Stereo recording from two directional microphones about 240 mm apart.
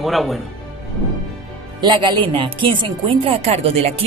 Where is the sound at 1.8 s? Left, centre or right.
Centre.